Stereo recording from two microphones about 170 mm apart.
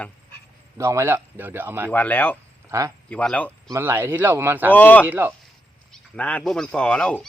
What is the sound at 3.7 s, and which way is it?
A man's voice, 15° right (ahead or behind).